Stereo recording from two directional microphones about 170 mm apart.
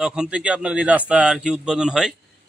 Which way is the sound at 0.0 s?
5° right (ahead or behind).